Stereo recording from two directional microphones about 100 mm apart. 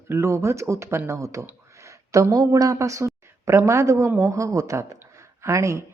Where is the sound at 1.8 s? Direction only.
30° right (ahead or behind).